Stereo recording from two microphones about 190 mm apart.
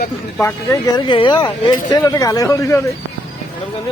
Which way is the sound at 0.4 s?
20° left (ahead or behind).